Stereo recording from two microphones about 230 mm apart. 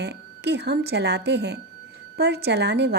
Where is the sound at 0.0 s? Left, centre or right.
Right.